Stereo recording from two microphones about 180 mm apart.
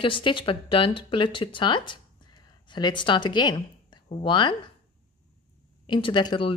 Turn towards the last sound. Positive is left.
turn(degrees=25)  # may be behind; listen again after turning